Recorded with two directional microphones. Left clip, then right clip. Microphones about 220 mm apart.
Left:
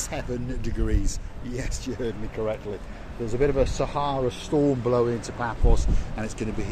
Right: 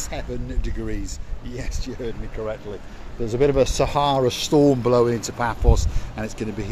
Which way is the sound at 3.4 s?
45° right (ahead or behind).